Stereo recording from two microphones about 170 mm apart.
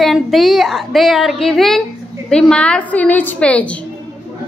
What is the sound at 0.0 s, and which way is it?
A woman's voice, centre (ahead or behind).